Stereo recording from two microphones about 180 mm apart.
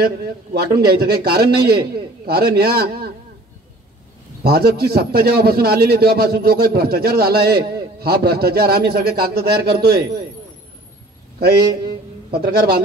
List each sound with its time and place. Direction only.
0.0 s a man's voice: 60° right (ahead or behind)
4.4 s a man's voice: 60° right (ahead or behind)
11.3 s a man's voice: 60° right (ahead or behind)